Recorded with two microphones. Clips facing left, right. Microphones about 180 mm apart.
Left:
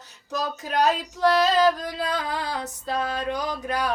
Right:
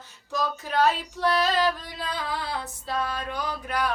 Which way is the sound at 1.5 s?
40° left (ahead or behind).